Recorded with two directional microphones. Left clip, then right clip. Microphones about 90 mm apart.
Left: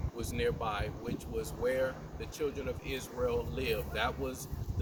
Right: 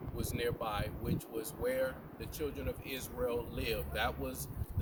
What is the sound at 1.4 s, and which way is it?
Speech, 15° right (ahead or behind).